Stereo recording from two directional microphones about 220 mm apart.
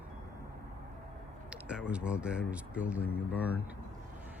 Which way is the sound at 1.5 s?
5° right (ahead or behind).